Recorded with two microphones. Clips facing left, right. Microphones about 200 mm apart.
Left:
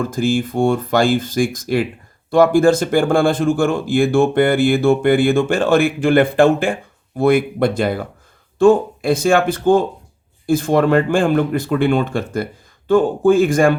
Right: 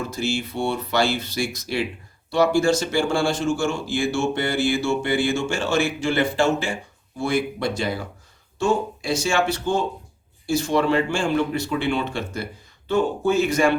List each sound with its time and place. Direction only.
0.0 s speech: 50° left (ahead or behind)